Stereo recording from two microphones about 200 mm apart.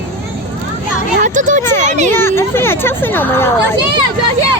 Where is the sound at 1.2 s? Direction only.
40° right (ahead or behind).